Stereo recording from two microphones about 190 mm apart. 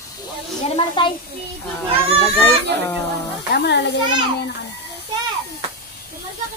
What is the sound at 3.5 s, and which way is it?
Speech, 60° left (ahead or behind).